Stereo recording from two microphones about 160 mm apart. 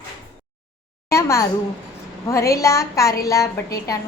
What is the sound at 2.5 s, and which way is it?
A woman's voice, 20° left (ahead or behind).